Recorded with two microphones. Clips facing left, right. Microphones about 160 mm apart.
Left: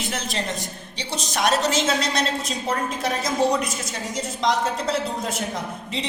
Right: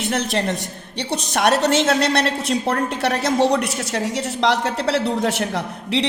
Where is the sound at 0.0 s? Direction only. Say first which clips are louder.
Right 7 dB; 65° right (ahead or behind).